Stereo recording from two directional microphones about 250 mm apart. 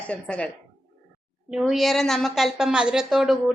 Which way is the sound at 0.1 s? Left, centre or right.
Centre.